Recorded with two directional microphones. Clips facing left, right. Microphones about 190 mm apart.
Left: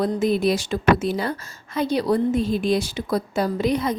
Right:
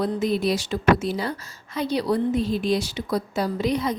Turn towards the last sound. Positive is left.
turn(degrees=50)  # may be behind; listen again after turning